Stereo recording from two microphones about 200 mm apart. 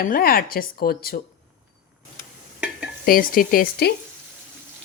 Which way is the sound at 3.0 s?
45° left (ahead or behind).